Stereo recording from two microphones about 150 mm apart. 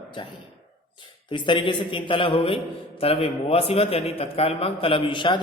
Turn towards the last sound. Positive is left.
turn(degrees=35)  # may be behind; listen again after turning